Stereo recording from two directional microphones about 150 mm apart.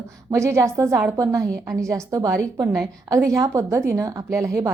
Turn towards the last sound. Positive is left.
turn(degrees=-20)  # may be behind; listen again after turning